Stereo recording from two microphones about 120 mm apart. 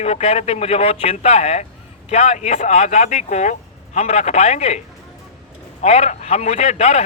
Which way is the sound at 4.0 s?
65° left (ahead or behind).